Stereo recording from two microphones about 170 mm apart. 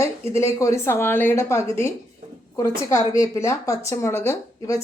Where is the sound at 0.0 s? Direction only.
15° left (ahead or behind).